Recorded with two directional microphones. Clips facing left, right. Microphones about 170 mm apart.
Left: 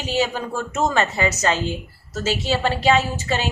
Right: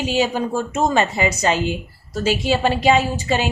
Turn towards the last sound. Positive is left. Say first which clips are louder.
# right 3 dB
turn(degrees=-15)  # may be behind; listen again after turning